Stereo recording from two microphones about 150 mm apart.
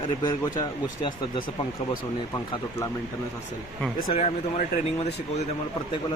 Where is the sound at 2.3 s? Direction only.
20° left (ahead or behind).